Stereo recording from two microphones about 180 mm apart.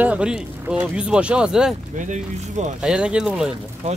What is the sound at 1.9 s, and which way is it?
Speech, 45° right (ahead or behind).